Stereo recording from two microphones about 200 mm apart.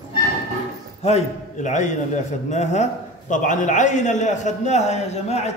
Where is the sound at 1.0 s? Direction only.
35° left (ahead or behind).